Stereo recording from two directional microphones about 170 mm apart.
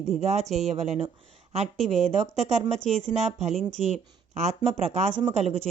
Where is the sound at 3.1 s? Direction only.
45° right (ahead or behind).